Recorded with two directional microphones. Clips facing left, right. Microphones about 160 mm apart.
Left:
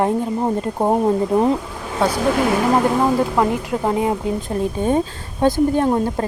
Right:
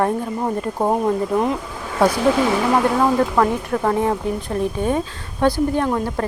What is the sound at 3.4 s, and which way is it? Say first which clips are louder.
A woman's voice: even; 20° left (ahead or behind).